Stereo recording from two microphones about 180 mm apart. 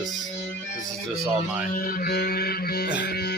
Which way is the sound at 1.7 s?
50° left (ahead or behind).